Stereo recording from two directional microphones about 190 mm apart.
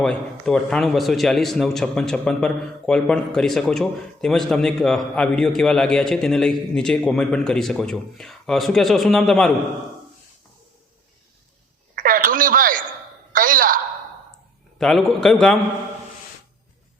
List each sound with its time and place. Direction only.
0.0 s a man's voice: 5° left (ahead or behind)
11.9 s radio: 45° right (ahead or behind)
13.3 s a sound: 45° right (ahead or behind)
14.8 s a man's voice: centre (ahead or behind)